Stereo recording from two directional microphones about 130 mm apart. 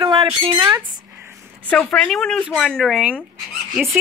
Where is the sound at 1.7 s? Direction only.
10° left (ahead or behind); by 3.2 s 5° right (ahead or behind).